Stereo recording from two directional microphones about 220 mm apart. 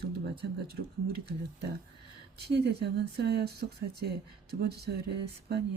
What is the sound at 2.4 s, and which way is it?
Speech, 50° right (ahead or behind).